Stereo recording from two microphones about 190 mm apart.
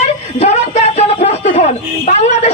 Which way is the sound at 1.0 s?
35° left (ahead or behind).